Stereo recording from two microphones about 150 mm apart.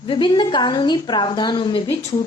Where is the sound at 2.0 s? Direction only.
45° left (ahead or behind).